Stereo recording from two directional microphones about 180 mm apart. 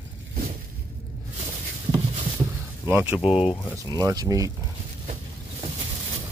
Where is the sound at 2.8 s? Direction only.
10° right (ahead or behind).